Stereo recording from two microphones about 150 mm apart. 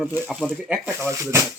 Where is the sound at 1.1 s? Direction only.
20° right (ahead or behind).